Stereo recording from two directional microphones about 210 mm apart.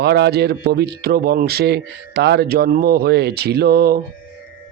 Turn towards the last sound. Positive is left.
turn(degrees=-50)  # may be behind; listen again after turning